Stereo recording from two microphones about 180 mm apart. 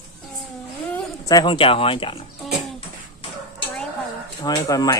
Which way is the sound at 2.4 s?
Centre (ahead or behind).